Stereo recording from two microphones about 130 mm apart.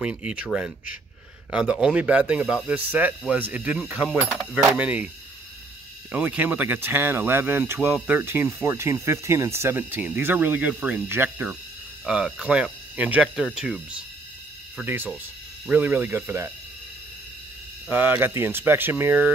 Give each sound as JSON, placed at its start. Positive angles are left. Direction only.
{"t": 0.0, "sound": "speech", "side_deg": -10}
{"t": 4.3, "sound": "speech", "side_deg": 0}
{"t": 4.6, "sound": "speech", "side_deg": -10}
{"t": 6.1, "sound": "speech", "side_deg": -15}
{"t": 12.1, "sound": "speech", "side_deg": -5}
{"t": 14.9, "sound": "speech", "side_deg": -15}
{"t": 17.8, "sound": "speech", "side_deg": -15}